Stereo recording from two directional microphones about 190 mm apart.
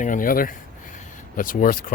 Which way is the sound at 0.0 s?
45° left (ahead or behind).